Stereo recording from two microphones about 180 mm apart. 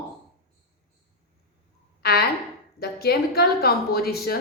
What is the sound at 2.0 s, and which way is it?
A woman's voice, 60° left (ahead or behind).